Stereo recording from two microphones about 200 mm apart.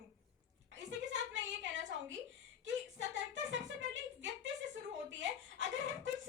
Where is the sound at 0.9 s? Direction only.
65° right (ahead or behind).